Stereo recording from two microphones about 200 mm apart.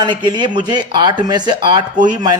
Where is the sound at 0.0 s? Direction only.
20° right (ahead or behind).